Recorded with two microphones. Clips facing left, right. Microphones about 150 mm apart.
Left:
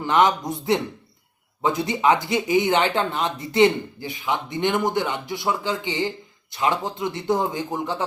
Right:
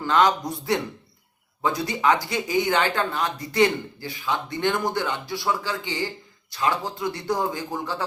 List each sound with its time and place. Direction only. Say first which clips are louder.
0.0 s speech: left 1 dB; 20° left (ahead or behind)